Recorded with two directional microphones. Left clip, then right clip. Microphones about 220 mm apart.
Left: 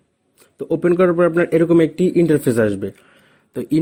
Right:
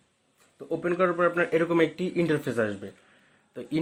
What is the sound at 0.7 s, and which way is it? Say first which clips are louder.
Speech: left 10 dB; 40° left (ahead or behind).